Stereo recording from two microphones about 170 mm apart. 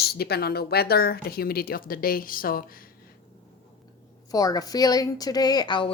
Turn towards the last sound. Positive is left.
turn(degrees=30)  # may be behind; listen again after turning